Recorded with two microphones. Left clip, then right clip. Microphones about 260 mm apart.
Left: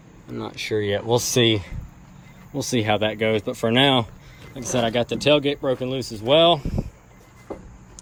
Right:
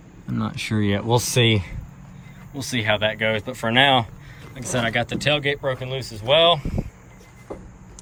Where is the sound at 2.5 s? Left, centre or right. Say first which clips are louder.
Even; centre.